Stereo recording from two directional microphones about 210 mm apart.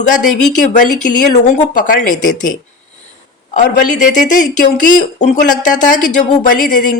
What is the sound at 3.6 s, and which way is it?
Speech, 35° left (ahead or behind).